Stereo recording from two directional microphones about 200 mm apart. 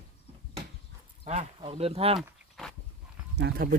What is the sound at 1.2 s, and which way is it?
Speech, 30° right (ahead or behind).